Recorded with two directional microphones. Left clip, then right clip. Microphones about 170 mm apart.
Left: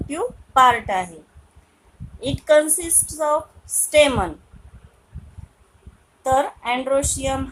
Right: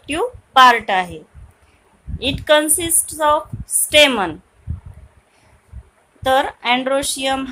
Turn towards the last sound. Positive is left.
turn(degrees=-40)  # may be behind; listen again after turning